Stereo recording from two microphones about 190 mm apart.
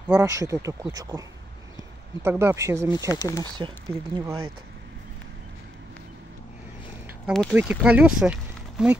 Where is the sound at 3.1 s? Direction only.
15° left (ahead or behind).